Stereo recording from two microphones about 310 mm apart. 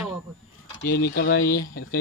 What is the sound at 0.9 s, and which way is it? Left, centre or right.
Speech, left.